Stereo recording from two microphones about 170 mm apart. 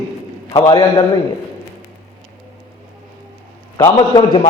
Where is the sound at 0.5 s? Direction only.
20° left (ahead or behind).